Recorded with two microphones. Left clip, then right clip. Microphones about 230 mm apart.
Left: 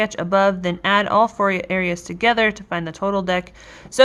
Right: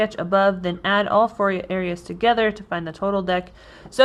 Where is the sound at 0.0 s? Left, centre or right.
Centre.